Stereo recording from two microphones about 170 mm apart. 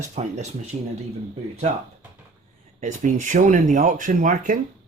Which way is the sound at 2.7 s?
45° right (ahead or behind).